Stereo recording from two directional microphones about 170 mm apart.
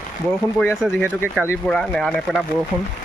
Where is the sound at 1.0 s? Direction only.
10° right (ahead or behind).